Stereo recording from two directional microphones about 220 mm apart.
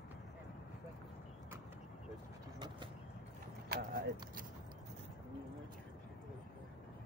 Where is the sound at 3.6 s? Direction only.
40° right (ahead or behind).